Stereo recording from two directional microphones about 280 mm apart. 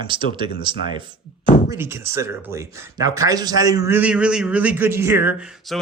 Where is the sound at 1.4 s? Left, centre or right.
Left.